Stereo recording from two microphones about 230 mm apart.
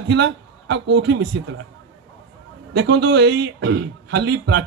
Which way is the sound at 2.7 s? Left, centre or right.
Right.